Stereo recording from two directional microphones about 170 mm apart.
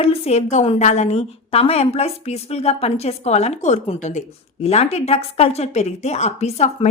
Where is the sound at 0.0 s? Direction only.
40° left (ahead or behind).